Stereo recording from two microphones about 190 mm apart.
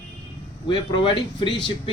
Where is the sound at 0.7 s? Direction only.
25° left (ahead or behind).